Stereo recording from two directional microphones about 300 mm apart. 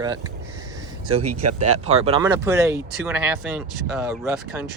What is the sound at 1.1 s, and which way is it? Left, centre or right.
Speech, right.